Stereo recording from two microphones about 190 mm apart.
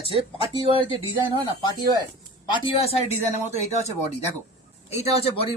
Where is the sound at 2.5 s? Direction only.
30° left (ahead or behind).